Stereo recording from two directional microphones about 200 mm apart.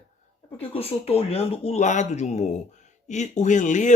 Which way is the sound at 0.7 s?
30° left (ahead or behind).